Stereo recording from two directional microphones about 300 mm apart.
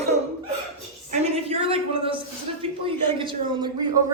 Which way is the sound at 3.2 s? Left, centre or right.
Centre.